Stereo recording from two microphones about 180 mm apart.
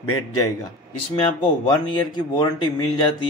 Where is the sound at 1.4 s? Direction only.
25° left (ahead or behind).